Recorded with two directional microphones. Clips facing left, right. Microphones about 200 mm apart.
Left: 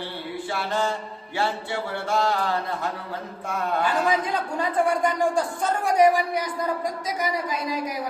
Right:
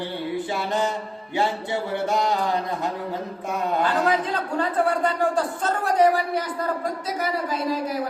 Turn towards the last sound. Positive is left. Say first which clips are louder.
# right 3 dB
turn(degrees=15)  # may be behind; listen again after turning